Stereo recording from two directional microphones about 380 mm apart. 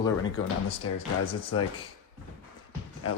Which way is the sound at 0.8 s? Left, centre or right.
Left.